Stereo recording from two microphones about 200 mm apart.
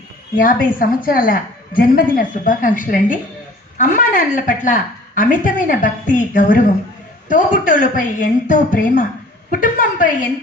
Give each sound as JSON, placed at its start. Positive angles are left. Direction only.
{"t": 0.3, "sound": "a woman's voice", "side_deg": 45}